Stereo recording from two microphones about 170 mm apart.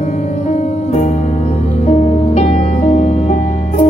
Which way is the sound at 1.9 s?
40° left (ahead or behind).